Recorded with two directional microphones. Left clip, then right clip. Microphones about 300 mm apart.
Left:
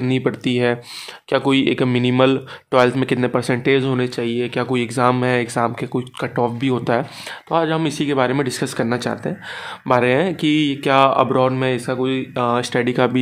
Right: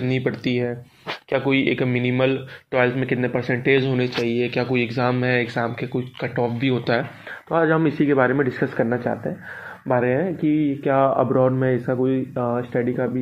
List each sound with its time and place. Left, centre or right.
0.0 s speech: left